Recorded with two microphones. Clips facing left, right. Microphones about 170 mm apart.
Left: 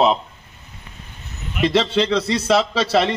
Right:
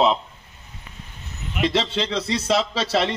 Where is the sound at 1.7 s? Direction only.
60° left (ahead or behind).